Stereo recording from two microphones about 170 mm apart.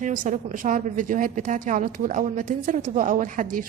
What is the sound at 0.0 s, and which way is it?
A woman's voice, 50° right (ahead or behind).